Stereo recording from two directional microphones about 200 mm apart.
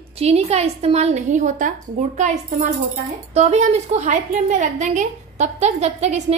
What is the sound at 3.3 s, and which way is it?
A woman's voice, 35° right (ahead or behind).